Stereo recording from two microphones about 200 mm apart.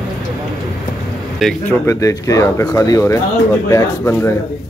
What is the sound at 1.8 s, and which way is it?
Speech, 15° left (ahead or behind).